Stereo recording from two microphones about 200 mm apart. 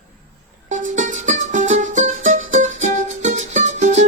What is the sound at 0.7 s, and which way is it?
Music, 40° right (ahead or behind).